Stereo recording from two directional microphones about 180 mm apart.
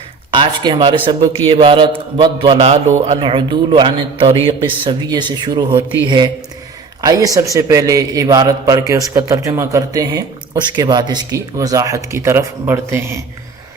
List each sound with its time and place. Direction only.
0.3 s a man's voice: 25° right (ahead or behind)
7.0 s a man's voice: 20° right (ahead or behind)